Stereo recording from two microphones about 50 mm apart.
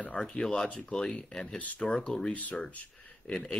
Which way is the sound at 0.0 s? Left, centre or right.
Left.